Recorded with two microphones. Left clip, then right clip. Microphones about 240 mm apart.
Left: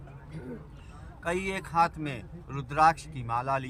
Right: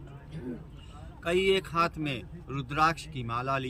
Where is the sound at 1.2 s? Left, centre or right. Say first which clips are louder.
Right 6 dB; centre.